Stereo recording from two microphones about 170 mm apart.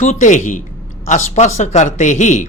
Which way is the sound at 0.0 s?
45° left (ahead or behind).